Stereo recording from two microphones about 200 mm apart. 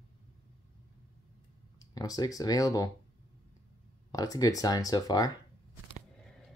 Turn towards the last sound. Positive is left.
turn(degrees=20)  # may be behind; listen again after turning